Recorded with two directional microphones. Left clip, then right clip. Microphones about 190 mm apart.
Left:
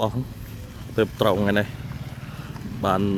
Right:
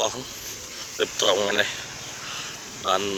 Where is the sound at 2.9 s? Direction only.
25° left (ahead or behind).